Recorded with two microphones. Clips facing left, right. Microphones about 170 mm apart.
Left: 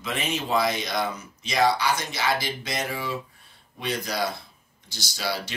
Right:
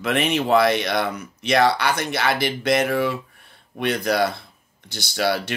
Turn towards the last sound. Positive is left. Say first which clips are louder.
# right 8 dB
turn(degrees=-60)  # may be behind; listen again after turning